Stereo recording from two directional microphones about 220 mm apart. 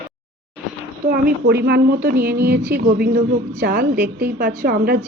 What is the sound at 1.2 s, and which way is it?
A woman's voice, 50° right (ahead or behind).